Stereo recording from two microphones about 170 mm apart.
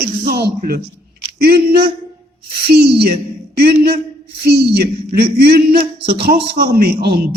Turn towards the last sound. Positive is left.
turn(degrees=-65)  # may be behind; listen again after turning